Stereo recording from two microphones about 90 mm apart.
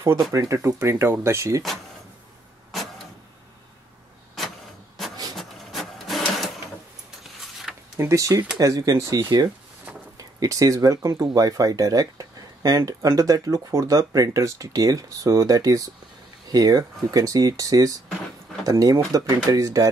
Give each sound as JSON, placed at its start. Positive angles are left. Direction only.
{"t": 0.3, "sound": "speech", "side_deg": -40}
{"t": 0.7, "sound": "speech", "side_deg": -30}
{"t": 5.3, "sound": "printer", "side_deg": 0}
{"t": 7.7, "sound": "a sound", "side_deg": -5}
{"t": 8.0, "sound": "speech", "side_deg": -35}